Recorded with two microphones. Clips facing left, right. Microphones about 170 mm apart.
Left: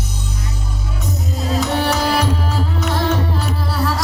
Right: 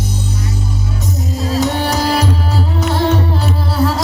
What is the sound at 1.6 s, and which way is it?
Music, 35° right (ahead or behind).